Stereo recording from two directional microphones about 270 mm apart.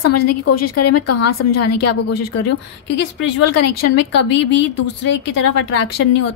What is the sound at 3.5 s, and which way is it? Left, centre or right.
Speech, left.